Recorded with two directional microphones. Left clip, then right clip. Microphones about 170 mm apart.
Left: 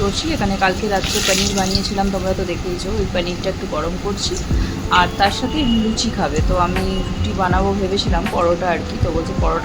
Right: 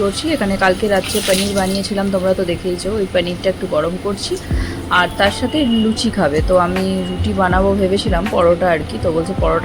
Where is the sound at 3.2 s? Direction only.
15° right (ahead or behind).